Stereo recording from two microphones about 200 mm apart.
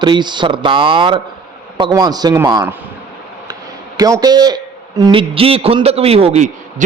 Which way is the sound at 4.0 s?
20° right (ahead or behind).